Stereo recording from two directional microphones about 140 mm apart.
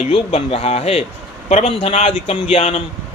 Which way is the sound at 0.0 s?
45° left (ahead or behind).